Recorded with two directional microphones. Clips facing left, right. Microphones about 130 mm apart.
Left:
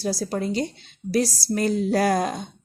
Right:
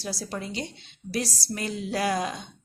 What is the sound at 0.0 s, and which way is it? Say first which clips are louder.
Speech: left 8 dB; 40° left (ahead or behind).